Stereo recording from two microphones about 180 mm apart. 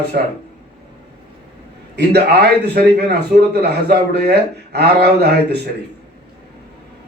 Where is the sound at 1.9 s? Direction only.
65° right (ahead or behind).